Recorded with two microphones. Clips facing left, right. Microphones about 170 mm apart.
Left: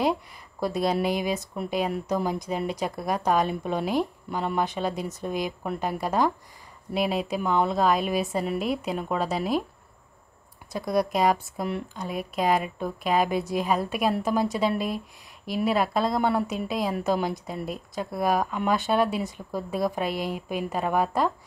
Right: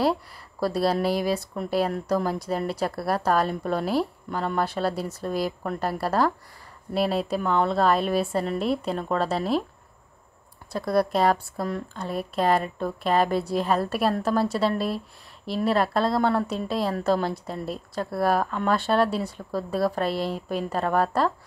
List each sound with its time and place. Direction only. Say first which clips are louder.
0.6 s a woman's voice: right 2 dB; 20° left (ahead or behind)
10.7 s a woman's voice: right 2 dB; 15° left (ahead or behind)